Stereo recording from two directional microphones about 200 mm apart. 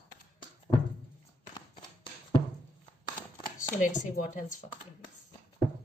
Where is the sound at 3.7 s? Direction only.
40° left (ahead or behind).